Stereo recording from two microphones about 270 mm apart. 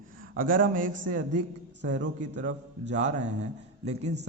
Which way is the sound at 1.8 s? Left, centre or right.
Right.